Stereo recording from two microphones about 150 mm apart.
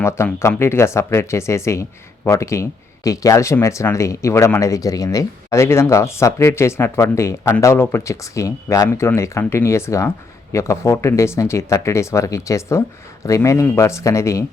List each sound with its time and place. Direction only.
0.0 s speech: 15° left (ahead or behind)